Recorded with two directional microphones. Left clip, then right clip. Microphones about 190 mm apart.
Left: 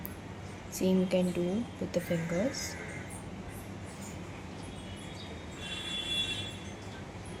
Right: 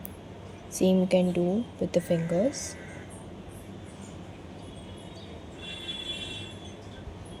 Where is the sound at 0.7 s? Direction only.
25° right (ahead or behind).